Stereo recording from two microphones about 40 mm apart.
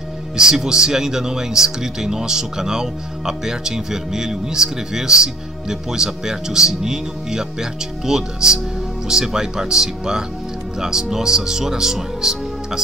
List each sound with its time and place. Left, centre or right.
0.4 s speech: centre